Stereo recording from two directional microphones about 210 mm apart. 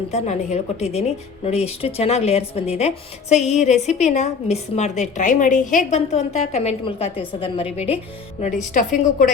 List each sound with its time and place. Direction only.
0.1 s a woman's voice: 30° left (ahead or behind)
8.7 s a woman's voice: 40° left (ahead or behind)